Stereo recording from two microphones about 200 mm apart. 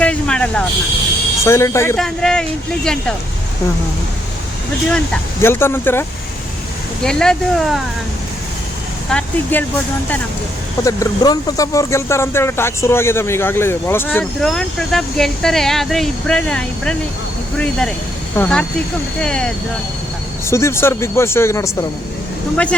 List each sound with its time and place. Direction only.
0.0 s vehicle: 5° left (ahead or behind)
1.5 s speech: 15° left (ahead or behind)
2.0 s speech: 5° left (ahead or behind)
4.9 s speech: 10° left (ahead or behind)
9.0 s speech: 5° left (ahead or behind)
10.8 s speech: 20° left (ahead or behind)
20.5 s speech: 15° left (ahead or behind)